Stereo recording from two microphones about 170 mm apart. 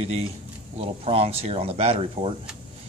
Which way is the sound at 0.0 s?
35° right (ahead or behind).